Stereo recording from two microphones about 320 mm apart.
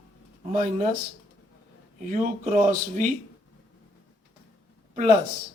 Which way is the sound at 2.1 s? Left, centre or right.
Right.